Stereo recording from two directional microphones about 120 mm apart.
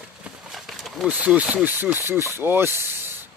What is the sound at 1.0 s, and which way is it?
Speech, 10° right (ahead or behind).